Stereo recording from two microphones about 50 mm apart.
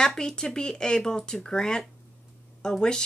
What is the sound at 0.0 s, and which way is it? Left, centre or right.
Speech, centre.